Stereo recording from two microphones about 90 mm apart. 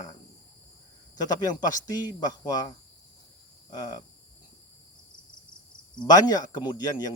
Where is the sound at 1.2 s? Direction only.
45° left (ahead or behind).